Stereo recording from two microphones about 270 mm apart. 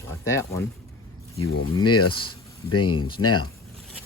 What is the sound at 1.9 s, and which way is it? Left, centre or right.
Speech, left.